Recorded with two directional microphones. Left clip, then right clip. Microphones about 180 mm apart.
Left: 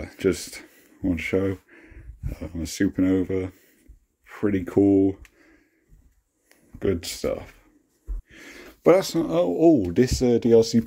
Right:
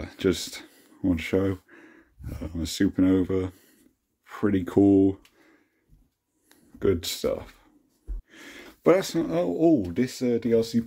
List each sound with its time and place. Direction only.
0.0 s speech: centre (ahead or behind)
9.8 s speech: 35° left (ahead or behind)